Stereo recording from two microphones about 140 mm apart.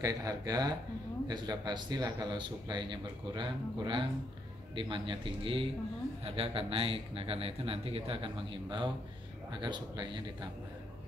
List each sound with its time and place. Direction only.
0.0 s speech: 25° right (ahead or behind)